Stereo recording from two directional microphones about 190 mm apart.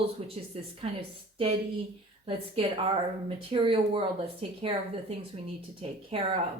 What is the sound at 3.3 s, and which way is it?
A woman's voice, 30° right (ahead or behind).